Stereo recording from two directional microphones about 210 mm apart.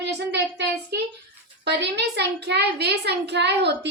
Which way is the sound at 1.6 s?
55° right (ahead or behind).